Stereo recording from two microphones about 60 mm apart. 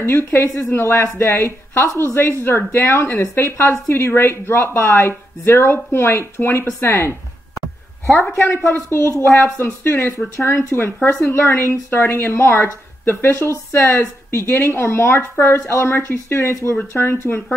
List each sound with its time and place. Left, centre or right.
0.0 s a woman's voice: left
8.4 s a woman's voice: left
10.1 s a woman's voice: left